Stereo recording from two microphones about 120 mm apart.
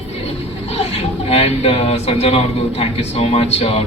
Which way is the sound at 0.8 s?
55° left (ahead or behind).